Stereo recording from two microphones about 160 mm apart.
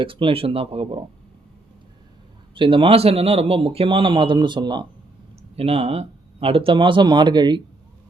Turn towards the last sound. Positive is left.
turn(degrees=-30)  # may be behind; listen again after turning